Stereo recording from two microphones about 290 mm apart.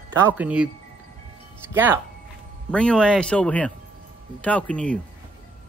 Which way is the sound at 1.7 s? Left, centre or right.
Centre.